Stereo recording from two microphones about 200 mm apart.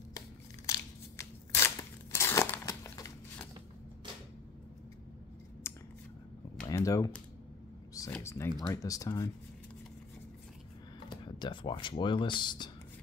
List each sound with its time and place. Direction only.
0.7 s scissors: 15° left (ahead or behind)
5.6 s scissors: 15° left (ahead or behind)
6.7 s a sound: 15° left (ahead or behind)
7.9 s speech: 15° left (ahead or behind)
11.1 s speech: 20° left (ahead or behind)